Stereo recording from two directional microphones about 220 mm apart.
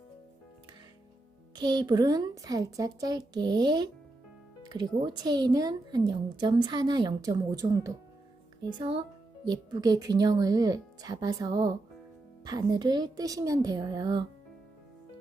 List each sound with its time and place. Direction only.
1.5 s a woman's voice: 20° right (ahead or behind)